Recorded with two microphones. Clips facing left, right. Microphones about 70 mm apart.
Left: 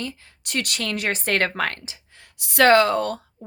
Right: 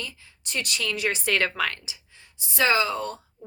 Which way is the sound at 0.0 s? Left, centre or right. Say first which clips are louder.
Left 6 dB; left.